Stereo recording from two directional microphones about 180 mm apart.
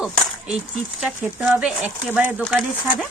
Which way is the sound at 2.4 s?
Centre (ahead or behind).